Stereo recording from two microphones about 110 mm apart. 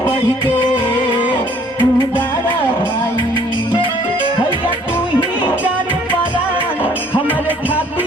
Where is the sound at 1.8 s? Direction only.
20° left (ahead or behind).